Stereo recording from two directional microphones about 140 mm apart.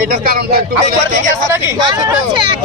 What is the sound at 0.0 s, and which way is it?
Speech, 90° right.